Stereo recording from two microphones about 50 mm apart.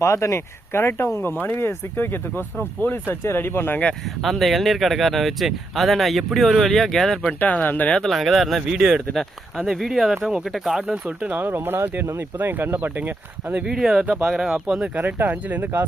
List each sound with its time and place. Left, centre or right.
0.0 s speech: left
4.2 s speech: centre
7.2 s speech: left
8.1 s speech: centre
10.9 s speech: right
13.5 s speech: centre
13.7 s speech: centre
14.9 s speech: right